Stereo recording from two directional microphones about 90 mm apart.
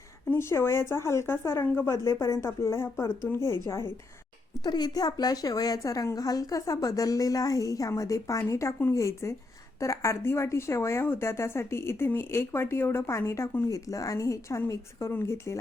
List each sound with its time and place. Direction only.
0.3 s a woman's voice: 30° left (ahead or behind)
4.6 s a woman's voice: 50° left (ahead or behind); by 15.5 s 35° left (ahead or behind)